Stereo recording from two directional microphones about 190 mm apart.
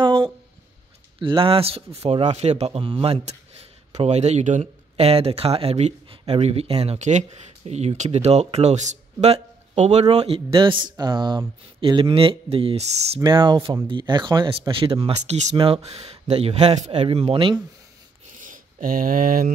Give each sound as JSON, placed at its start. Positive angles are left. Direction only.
{"t": 0.0, "sound": "a sound", "side_deg": -25}
{"t": 1.2, "sound": "speech", "side_deg": -25}
{"t": 13.2, "sound": "speech", "side_deg": -25}
{"t": 18.4, "sound": "speech", "side_deg": -45}